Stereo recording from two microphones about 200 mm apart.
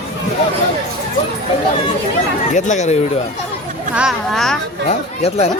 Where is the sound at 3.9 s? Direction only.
Centre (ahead or behind).